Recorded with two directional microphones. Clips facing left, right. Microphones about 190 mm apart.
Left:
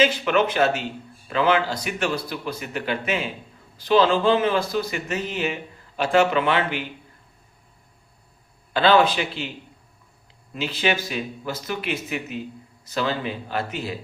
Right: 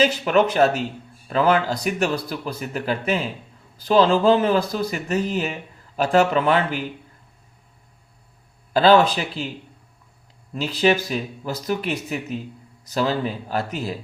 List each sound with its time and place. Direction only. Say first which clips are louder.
0.0 s speech: right 2 dB; 40° right (ahead or behind)
8.7 s speech: right 3 dB; 40° right (ahead or behind)
10.5 s speech: right 5 dB; 40° right (ahead or behind)